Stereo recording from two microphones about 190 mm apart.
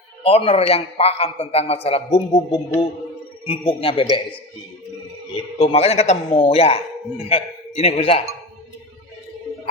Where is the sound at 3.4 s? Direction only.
25° left (ahead or behind).